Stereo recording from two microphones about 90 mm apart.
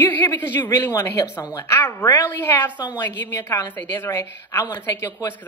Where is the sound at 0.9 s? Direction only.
30° left (ahead or behind).